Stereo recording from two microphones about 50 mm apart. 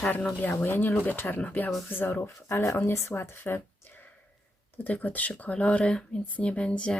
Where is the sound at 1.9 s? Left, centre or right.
Left.